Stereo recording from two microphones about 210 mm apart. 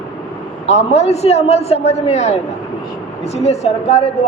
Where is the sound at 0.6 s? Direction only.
30° left (ahead or behind).